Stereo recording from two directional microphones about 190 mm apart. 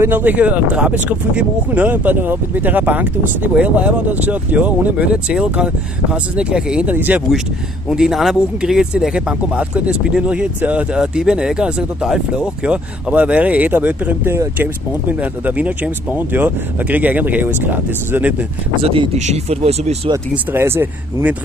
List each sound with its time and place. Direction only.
0.0 s speech: 10° right (ahead or behind)
18.8 s speech: 30° right (ahead or behind)
20.1 s speech: 15° right (ahead or behind)